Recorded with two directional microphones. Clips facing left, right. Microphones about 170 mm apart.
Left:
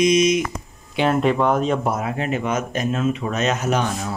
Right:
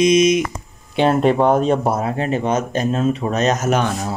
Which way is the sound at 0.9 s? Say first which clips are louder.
Right 3 dB; 30° right (ahead or behind).